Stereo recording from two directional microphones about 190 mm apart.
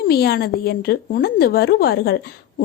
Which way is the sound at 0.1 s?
55° left (ahead or behind).